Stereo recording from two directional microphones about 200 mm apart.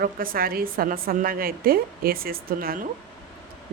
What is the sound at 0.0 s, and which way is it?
A woman's voice, 45° right (ahead or behind).